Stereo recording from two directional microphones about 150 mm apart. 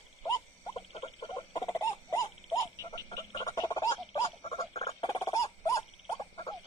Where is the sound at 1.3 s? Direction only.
30° left (ahead or behind).